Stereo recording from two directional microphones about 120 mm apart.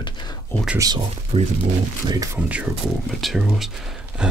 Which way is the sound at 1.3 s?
60° right (ahead or behind).